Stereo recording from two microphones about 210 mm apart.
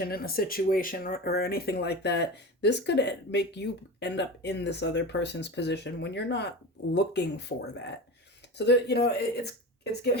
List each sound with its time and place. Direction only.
0.0 s speech: 45° left (ahead or behind)